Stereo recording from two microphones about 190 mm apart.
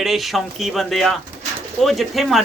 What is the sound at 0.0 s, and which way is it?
Speech, centre (ahead or behind).